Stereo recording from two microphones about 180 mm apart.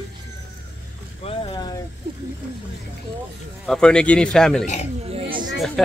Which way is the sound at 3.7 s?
5° left (ahead or behind).